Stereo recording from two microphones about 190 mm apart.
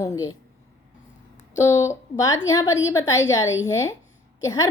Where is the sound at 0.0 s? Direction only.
20° left (ahead or behind).